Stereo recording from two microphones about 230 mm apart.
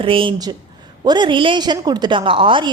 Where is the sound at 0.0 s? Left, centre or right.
Right.